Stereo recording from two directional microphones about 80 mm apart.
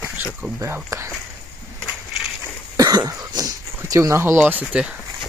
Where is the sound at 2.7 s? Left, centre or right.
Right.